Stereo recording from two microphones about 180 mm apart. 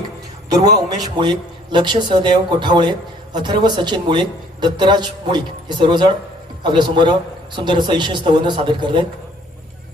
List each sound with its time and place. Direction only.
0.5 s a woman's voice: 20° right (ahead or behind)